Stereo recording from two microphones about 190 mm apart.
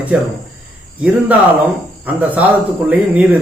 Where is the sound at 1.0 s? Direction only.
10° right (ahead or behind).